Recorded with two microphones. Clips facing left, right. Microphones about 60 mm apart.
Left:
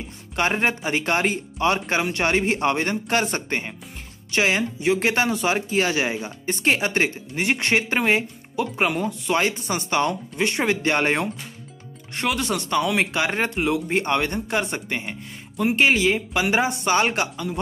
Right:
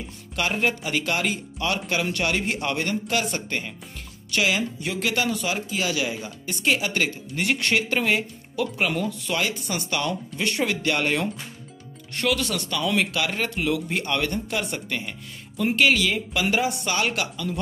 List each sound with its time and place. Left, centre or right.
0.4 s speech: left